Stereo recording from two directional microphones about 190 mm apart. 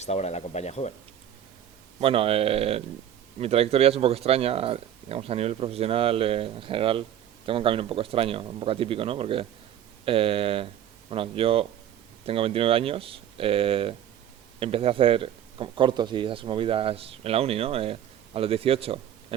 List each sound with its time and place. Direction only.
0.0 s speech: 35° left (ahead or behind)
2.0 s speech: 30° right (ahead or behind)